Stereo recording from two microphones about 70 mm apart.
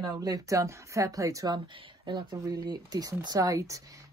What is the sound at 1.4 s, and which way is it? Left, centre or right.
Speech, right.